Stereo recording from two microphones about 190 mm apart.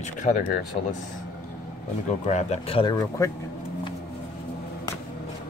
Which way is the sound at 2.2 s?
35° left (ahead or behind).